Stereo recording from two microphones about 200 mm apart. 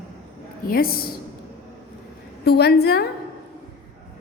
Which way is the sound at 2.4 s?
55° left (ahead or behind).